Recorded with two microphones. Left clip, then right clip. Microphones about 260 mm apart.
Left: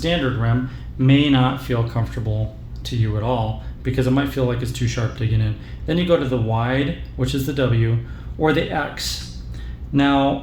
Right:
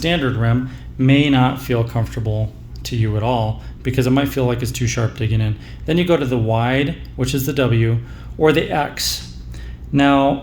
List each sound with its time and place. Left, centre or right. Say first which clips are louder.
0.0 s speech: right 2 dB; right